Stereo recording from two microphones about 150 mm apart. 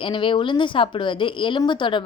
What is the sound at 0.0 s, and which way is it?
A woman's voice, 35° left (ahead or behind).